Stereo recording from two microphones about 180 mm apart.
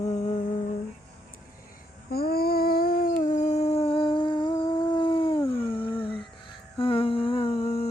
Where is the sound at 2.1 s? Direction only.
60° left (ahead or behind); by 6.3 s 30° left (ahead or behind).